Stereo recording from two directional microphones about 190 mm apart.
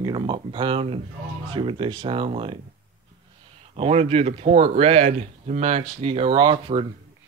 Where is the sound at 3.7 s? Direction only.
30° right (ahead or behind).